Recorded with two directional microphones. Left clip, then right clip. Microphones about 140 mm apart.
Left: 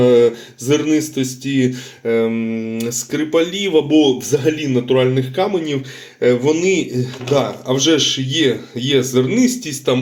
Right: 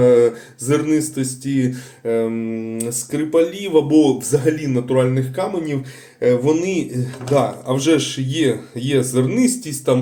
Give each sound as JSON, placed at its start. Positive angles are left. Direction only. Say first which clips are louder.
{"t": 0.0, "sound": "speech", "louder": "left 1 dB", "side_deg": 30}